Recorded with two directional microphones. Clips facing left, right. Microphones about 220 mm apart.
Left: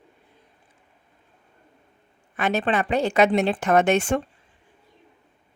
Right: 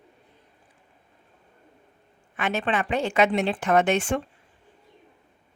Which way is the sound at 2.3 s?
40° left (ahead or behind).